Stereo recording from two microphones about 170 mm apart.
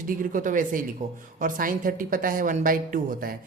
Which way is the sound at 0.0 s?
55° right (ahead or behind).